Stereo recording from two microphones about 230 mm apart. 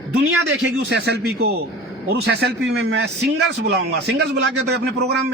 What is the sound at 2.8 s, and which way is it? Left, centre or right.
Speech, right.